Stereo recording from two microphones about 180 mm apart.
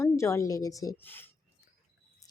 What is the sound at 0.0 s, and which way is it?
Speech, 15° left (ahead or behind).